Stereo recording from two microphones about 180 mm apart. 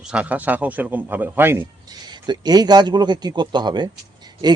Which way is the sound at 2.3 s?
25° right (ahead or behind).